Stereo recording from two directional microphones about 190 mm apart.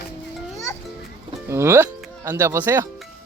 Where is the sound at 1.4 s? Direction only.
15° right (ahead or behind).